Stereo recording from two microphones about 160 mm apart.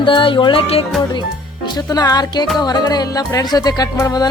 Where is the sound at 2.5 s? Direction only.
25° left (ahead or behind).